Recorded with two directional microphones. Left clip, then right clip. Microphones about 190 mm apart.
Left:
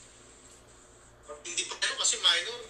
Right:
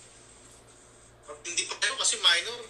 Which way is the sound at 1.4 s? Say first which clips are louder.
Right 3 dB; 25° right (ahead or behind).